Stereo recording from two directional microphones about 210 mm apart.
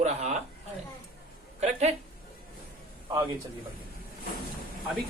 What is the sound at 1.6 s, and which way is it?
Speech, 30° right (ahead or behind).